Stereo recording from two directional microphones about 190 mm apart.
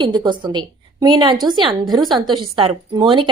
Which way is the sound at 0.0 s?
25° right (ahead or behind).